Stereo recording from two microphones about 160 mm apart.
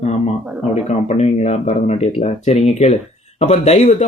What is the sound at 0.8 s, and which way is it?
Speech, 45° left (ahead or behind).